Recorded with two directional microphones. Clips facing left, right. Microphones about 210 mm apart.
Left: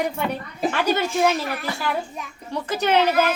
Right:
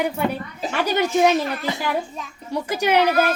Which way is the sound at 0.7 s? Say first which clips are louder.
Right 4 dB; 20° right (ahead or behind).